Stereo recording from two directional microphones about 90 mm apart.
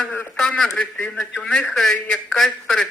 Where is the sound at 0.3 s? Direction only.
10° left (ahead or behind).